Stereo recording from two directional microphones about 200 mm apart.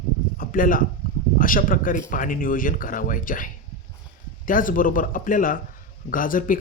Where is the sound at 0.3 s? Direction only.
45° left (ahead or behind).